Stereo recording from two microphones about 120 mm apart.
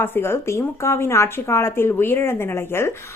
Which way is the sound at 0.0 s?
20° left (ahead or behind).